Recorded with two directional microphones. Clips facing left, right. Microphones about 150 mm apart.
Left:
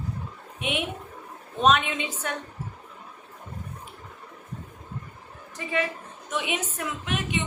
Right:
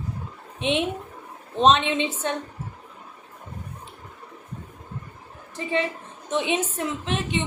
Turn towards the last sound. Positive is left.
turn(degrees=-30)  # may be behind; listen again after turning